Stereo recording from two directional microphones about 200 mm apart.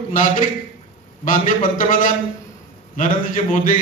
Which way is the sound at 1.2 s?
40° left (ahead or behind).